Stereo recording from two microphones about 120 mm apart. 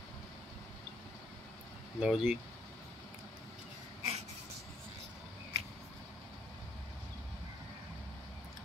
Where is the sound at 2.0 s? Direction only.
Centre (ahead or behind).